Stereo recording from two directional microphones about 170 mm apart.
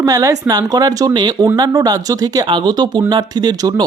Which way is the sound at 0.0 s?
20° right (ahead or behind).